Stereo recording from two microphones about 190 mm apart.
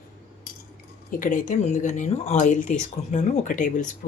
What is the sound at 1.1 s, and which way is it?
Speech, 45° left (ahead or behind).